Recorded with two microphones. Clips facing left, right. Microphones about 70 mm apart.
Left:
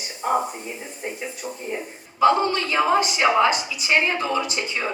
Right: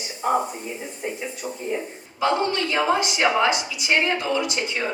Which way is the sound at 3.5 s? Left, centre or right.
Left.